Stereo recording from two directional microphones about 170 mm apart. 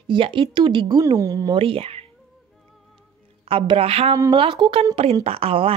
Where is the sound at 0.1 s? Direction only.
30° right (ahead or behind).